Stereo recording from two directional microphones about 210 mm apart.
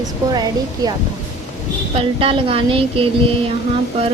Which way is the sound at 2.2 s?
25° right (ahead or behind).